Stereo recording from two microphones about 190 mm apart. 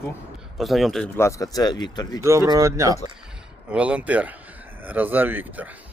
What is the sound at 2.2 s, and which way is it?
Speech, 15° right (ahead or behind).